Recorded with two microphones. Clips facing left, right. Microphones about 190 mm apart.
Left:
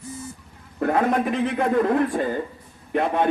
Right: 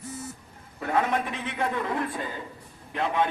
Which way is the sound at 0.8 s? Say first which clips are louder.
Left 5 dB; 50° left (ahead or behind).